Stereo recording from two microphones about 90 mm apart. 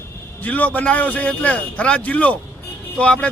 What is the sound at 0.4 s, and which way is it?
A man's voice, 15° left (ahead or behind).